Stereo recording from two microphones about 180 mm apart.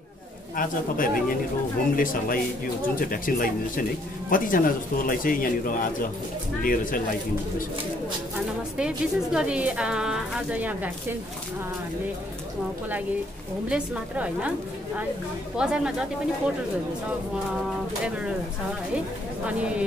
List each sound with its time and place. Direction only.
0.6 s a man's voice: 50° left (ahead or behind)
8.7 s a woman's voice: 5° right (ahead or behind)
13.7 s a woman's voice: 5° right (ahead or behind)
15.5 s a woman's voice: 5° right (ahead or behind)
19.4 s a woman's voice: 5° right (ahead or behind)